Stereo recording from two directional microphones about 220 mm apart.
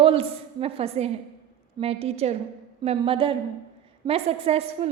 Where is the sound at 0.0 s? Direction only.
25° right (ahead or behind).